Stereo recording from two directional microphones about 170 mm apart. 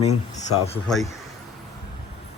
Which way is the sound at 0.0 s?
40° left (ahead or behind).